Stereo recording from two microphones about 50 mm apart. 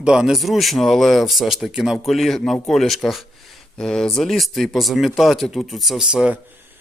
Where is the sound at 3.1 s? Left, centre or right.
Centre.